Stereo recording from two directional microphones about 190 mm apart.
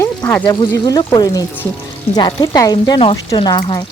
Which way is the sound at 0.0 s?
10° left (ahead or behind).